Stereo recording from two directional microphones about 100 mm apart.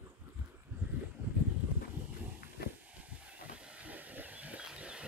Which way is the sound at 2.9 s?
15° right (ahead or behind).